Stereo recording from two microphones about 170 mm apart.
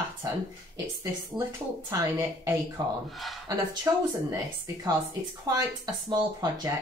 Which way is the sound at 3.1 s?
Centre (ahead or behind).